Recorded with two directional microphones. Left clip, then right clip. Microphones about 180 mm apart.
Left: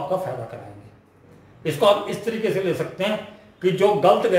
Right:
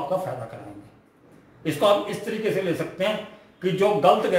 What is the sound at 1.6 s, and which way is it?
Speech, 30° left (ahead or behind).